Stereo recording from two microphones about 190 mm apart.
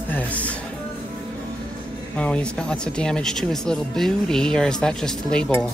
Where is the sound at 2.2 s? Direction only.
5° left (ahead or behind).